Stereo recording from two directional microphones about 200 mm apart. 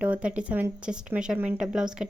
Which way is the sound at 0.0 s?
5° right (ahead or behind).